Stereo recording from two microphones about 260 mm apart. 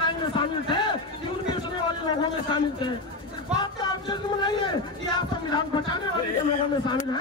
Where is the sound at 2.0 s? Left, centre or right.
Centre.